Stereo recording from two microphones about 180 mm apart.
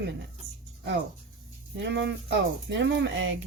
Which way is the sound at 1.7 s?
75° right (ahead or behind).